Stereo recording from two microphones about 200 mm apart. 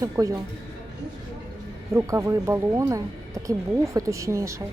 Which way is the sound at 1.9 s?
15° right (ahead or behind).